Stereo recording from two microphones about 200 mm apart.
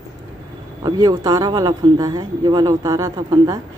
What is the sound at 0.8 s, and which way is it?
A man's voice, 20° right (ahead or behind).